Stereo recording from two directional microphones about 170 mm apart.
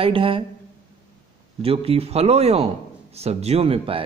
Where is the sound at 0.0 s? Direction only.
35° right (ahead or behind).